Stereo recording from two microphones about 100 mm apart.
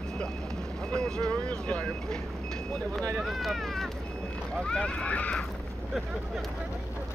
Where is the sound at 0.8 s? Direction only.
5° left (ahead or behind).